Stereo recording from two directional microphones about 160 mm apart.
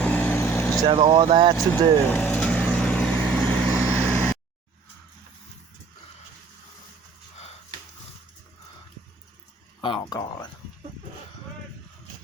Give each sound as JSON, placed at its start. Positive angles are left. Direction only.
{"t": 0.0, "sound": "vehicle", "side_deg": 10}
{"t": 0.9, "sound": "speech", "side_deg": -40}
{"t": 1.5, "sound": "vehicle", "side_deg": 10}
{"t": 3.8, "sound": "vehicle", "side_deg": -10}
{"t": 9.8, "sound": "speech", "side_deg": 30}